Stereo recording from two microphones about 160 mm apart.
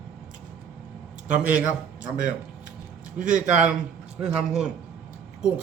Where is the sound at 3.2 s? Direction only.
55° right (ahead or behind).